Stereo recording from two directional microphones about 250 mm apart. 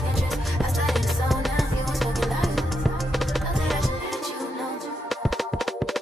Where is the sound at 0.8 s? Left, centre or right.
Centre.